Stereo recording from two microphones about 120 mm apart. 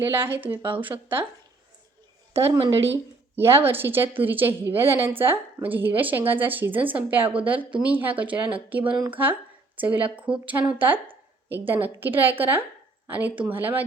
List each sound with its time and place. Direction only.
0.0 s a woman's voice: 20° right (ahead or behind)
2.3 s a woman's voice: 20° right (ahead or behind)